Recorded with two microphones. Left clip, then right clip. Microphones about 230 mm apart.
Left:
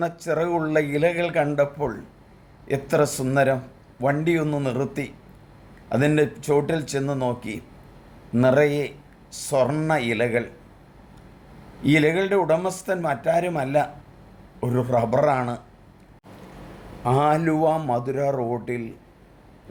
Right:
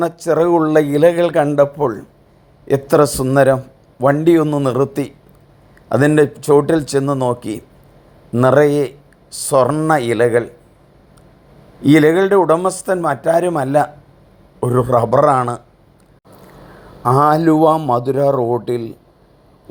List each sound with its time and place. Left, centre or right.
0.0 s a man's voice: right
11.8 s a man's voice: right
17.0 s a man's voice: centre